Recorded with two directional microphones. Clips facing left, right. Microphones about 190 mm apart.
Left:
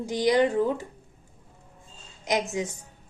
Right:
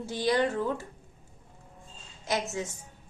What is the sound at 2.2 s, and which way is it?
Speech, 15° left (ahead or behind).